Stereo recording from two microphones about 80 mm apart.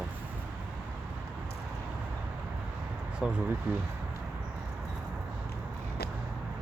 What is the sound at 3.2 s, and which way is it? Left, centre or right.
Speech, centre.